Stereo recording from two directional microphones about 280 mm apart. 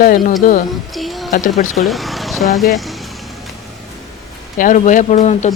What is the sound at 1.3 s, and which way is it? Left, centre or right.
Speech, left.